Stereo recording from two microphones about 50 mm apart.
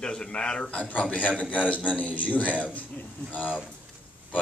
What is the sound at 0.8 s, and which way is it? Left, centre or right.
A man's voice, left.